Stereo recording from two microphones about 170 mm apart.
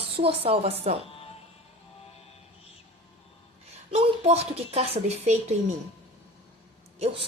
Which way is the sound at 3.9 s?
35° right (ahead or behind).